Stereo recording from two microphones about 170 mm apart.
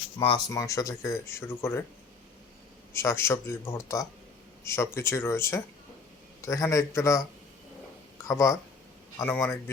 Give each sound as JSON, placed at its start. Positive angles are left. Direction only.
{"t": 0.2, "sound": "speech", "side_deg": 25}
{"t": 2.9, "sound": "speech", "side_deg": 15}
{"t": 8.3, "sound": "speech", "side_deg": 15}